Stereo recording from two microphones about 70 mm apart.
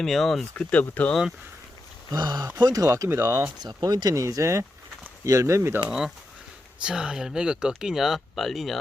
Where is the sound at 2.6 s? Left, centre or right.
Right.